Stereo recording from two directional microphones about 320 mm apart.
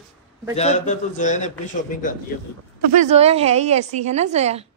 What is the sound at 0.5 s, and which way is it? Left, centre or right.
A man's voice, left.